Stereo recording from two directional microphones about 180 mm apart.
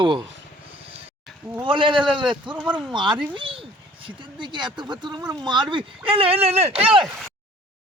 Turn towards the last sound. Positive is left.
turn(degrees=-35)  # may be behind; listen again after turning